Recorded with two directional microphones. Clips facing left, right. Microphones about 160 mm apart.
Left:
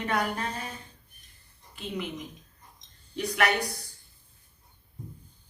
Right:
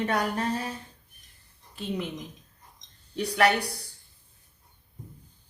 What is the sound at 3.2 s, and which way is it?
Speech, 35° right (ahead or behind).